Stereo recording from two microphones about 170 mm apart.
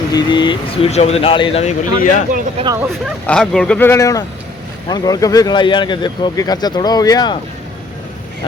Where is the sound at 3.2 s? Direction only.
5° left (ahead or behind); by 7.3 s 25° left (ahead or behind).